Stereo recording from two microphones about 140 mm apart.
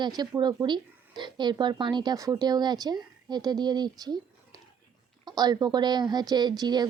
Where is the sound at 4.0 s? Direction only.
30° right (ahead or behind).